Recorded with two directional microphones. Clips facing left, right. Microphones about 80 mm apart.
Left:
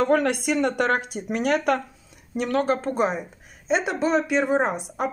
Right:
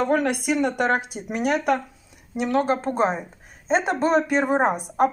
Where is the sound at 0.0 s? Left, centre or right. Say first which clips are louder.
Left 1 dB; centre.